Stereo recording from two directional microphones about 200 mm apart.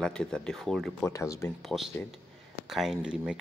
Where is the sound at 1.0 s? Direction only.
15° left (ahead or behind).